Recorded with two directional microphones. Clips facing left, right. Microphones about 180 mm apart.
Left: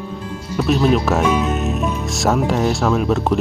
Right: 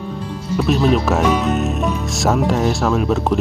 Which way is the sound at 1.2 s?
35° right (ahead or behind).